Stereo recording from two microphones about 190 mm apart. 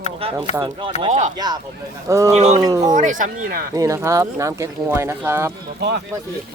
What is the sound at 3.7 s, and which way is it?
Speech, 15° right (ahead or behind).